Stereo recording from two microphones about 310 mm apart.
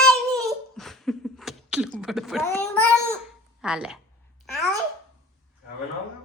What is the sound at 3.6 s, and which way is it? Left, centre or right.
Speech, centre.